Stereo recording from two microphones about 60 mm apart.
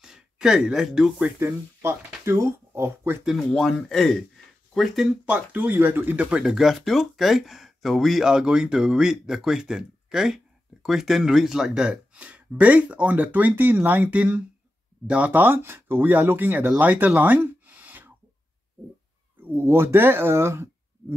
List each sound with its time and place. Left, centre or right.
0.0 s speech: centre
1.4 s speech: right
3.4 s speech: centre
5.3 s speech: right
6.4 s speech: centre; by 15.4 s right
15.4 s speech: right
19.4 s speech: right